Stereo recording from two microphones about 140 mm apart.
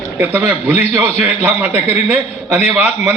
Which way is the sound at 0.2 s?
15° right (ahead or behind).